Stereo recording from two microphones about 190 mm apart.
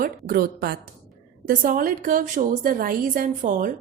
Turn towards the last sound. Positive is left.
turn(degrees=-45)  # may be behind; listen again after turning